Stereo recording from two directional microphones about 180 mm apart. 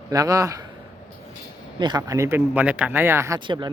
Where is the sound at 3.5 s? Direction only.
25° right (ahead or behind).